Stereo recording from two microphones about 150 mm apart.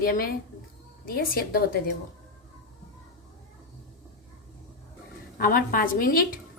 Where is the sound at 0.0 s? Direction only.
70° left (ahead or behind).